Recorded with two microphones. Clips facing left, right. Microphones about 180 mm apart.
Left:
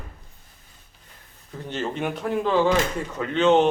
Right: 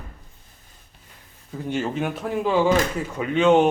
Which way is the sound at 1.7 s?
5° right (ahead or behind).